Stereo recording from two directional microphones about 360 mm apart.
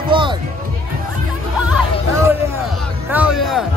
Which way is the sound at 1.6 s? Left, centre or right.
Centre.